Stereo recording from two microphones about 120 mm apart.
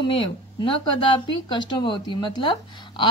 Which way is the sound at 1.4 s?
40° left (ahead or behind).